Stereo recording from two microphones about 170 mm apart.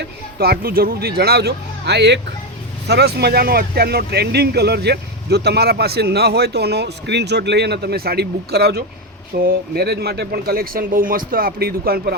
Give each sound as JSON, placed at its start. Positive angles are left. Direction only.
{"t": 0.3, "sound": "speech", "side_deg": -65}
{"t": 2.8, "sound": "speech", "side_deg": -75}
{"t": 9.3, "sound": "speech", "side_deg": -60}